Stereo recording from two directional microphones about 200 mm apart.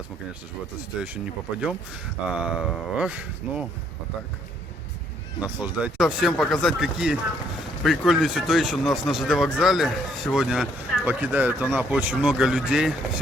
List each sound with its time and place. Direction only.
1.6 s speech: 5° right (ahead or behind)
5.4 s speech: 5° right (ahead or behind)